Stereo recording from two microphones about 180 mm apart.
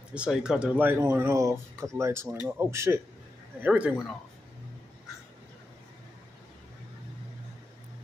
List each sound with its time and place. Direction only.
0.1 s speech: 5° right (ahead or behind)